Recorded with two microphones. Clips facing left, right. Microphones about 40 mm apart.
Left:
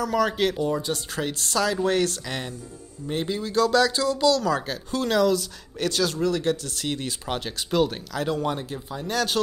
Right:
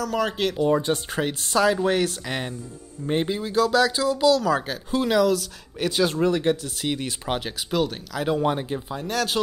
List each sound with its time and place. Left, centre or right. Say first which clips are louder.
0.1 s speech: left 2 dB; centre
0.7 s speech: right 5 dB; right
3.3 s speech: left 1 dB; centre
5.9 s speech: right 3 dB; centre
8.3 s speech: right 5 dB; centre
9.0 s speech: left 1 dB; centre